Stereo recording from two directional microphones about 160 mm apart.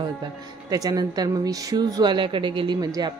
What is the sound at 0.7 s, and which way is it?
Speech, 25° right (ahead or behind).